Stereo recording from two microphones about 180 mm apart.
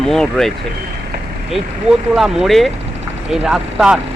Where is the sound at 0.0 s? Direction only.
5° left (ahead or behind).